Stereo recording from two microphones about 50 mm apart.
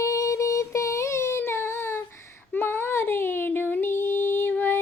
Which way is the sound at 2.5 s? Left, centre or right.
Left.